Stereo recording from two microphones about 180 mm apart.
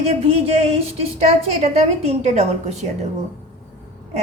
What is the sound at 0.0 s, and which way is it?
A woman's voice, 35° right (ahead or behind).